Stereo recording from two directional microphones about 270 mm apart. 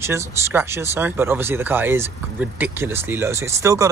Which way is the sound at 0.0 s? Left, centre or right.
Centre.